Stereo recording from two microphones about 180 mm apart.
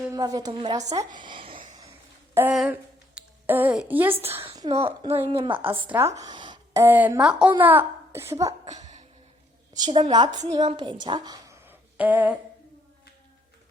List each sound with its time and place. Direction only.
0.0 s a woman's voice: 20° right (ahead or behind)
2.3 s a woman's voice: 10° right (ahead or behind)
4.4 s a sound: 20° right (ahead or behind)
4.7 s a woman's voice: 30° right (ahead or behind)
6.1 s a sound: 25° right (ahead or behind)
6.8 s a woman's voice: 10° right (ahead or behind)
8.6 s music: 40° right (ahead or behind)
9.7 s a woman's voice: 25° right (ahead or behind)
11.0 s a sound: 25° right (ahead or behind); by 12.4 s 10° right (ahead or behind)